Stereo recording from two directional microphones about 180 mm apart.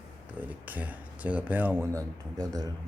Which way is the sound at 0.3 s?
10° right (ahead or behind).